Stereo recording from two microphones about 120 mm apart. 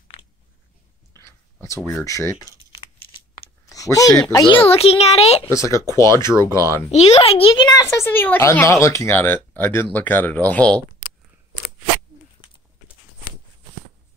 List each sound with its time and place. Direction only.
1.1 s whispering: 25° left (ahead or behind)
1.9 s speech: 25° left (ahead or behind)
3.6 s speech: 30° left (ahead or behind)
4.6 s a child's voice: 55° left (ahead or behind)
5.5 s speech: 25° left (ahead or behind)
6.9 s a child's voice: 65° left (ahead or behind); by 7.7 s 45° left (ahead or behind)
7.7 s speech: 25° left (ahead or behind)